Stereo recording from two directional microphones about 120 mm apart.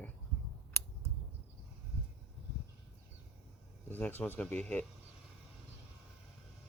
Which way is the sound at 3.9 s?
15° left (ahead or behind).